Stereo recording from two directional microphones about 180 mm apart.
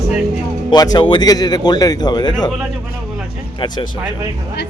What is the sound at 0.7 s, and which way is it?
Speech, 20° left (ahead or behind).